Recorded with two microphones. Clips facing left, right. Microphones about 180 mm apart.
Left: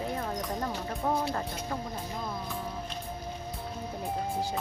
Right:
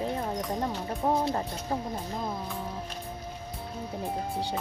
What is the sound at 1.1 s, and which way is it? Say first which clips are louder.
Speech: right 3 dB; 25° right (ahead or behind).